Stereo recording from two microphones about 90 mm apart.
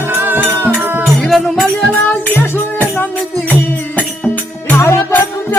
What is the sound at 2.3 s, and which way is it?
Music, 20° left (ahead or behind).